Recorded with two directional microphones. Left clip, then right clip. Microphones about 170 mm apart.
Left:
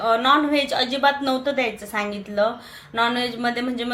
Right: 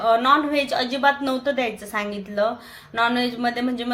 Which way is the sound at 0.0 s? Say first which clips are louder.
Even; centre (ahead or behind).